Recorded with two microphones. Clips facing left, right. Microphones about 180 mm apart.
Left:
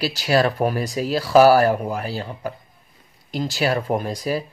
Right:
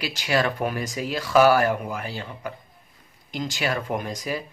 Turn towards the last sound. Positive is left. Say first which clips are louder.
# left 5 dB
turn(degrees=35)  # may be behind; listen again after turning